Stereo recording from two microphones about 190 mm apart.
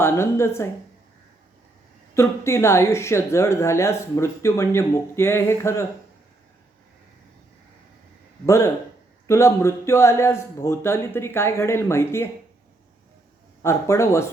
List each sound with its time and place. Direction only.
0.0 s speech: 15° left (ahead or behind)
2.1 s speech: 15° left (ahead or behind)
8.4 s speech: 15° left (ahead or behind)
13.6 s speech: 15° left (ahead or behind)